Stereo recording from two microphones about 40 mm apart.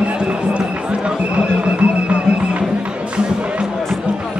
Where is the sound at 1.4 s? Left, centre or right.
Right.